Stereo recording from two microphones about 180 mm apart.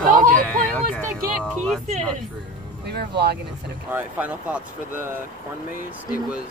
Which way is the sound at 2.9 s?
65° right (ahead or behind).